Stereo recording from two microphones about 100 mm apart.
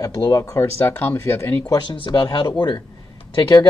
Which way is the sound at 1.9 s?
50° left (ahead or behind).